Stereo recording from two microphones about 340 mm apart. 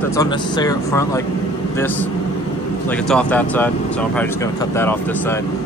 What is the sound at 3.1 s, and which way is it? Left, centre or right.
Speech, centre.